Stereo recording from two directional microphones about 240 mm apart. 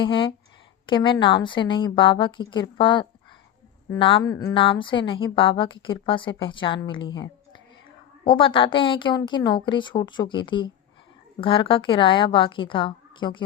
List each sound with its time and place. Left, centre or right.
0.0 s a woman's voice: left